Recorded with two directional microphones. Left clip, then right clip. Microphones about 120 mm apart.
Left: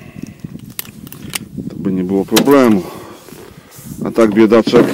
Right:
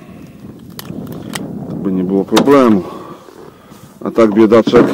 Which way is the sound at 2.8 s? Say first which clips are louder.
Right 2 dB; 45° left (ahead or behind).